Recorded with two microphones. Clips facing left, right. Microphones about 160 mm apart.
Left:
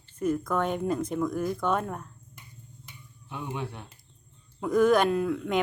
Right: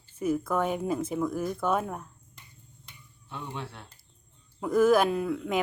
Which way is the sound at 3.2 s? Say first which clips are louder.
Left 3 dB; 15° left (ahead or behind).